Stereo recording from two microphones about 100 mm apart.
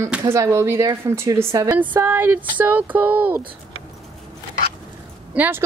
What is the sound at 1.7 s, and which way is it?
Speech, 20° right (ahead or behind).